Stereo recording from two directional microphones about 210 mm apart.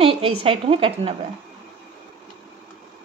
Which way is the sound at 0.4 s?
25° right (ahead or behind).